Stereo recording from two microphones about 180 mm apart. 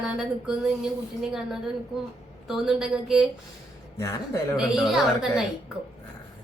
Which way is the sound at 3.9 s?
15° left (ahead or behind).